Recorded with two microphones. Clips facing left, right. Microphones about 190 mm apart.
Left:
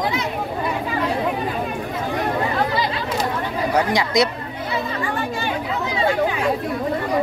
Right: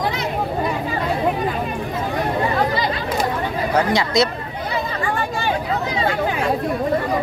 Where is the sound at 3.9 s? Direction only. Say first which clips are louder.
Right 1 dB; 15° left (ahead or behind).